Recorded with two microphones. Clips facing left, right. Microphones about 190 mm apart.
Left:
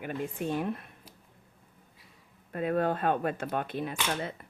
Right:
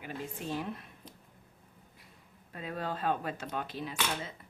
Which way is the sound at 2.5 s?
55° left (ahead or behind).